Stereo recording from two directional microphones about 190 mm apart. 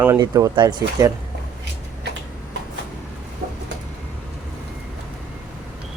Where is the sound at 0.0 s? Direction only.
15° right (ahead or behind).